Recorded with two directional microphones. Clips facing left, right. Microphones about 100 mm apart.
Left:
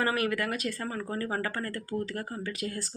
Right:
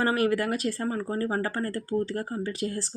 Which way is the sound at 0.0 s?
30° right (ahead or behind).